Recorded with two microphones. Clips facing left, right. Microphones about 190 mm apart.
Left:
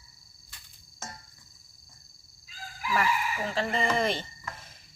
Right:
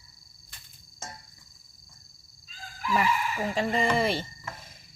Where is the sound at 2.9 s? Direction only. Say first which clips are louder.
Right 2 dB; 15° right (ahead or behind).